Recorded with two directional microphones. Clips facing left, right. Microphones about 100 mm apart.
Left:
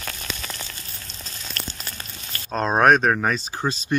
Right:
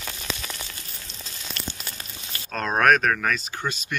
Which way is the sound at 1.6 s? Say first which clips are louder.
Left 1 dB; 45° left (ahead or behind).